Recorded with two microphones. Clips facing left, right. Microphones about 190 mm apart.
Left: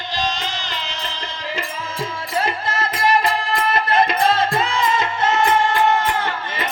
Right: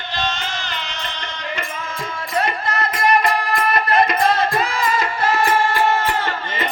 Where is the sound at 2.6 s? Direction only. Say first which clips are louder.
Right 1 dB; 25° left (ahead or behind).